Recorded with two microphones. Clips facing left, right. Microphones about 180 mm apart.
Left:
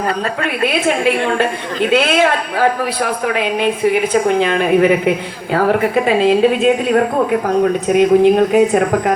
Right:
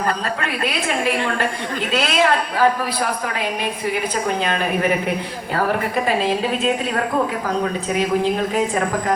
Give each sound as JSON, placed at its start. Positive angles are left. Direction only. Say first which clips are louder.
{"t": 0.7, "sound": "a woman's voice", "louder": "left 7 dB", "side_deg": 70}